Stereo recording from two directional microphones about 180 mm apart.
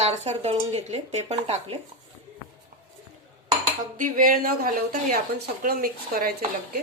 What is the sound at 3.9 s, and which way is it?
A woman's voice, 50° right (ahead or behind).